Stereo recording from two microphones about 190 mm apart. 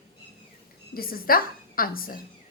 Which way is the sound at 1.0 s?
50° left (ahead or behind).